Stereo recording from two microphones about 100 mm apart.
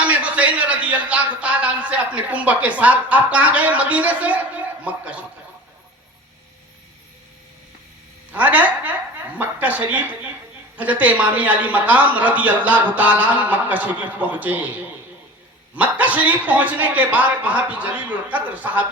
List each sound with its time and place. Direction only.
0.0 s a man's voice: 15° right (ahead or behind)
8.3 s a woman's voice: 15° right (ahead or behind)
15.7 s a man's voice: 15° right (ahead or behind)